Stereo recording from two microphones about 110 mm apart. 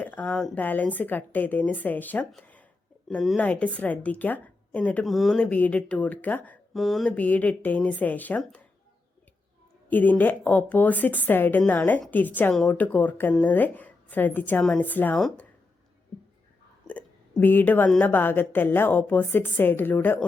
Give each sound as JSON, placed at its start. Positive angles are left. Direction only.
{"t": 0.0, "sound": "a woman's voice", "side_deg": 15}
{"t": 5.0, "sound": "a woman's voice", "side_deg": 0}
{"t": 6.7, "sound": "mantra", "side_deg": 0}
{"t": 7.2, "sound": "a woman's voice", "side_deg": 15}
{"t": 9.9, "sound": "a woman's voice", "side_deg": 15}
{"t": 17.4, "sound": "a woman's voice", "side_deg": 15}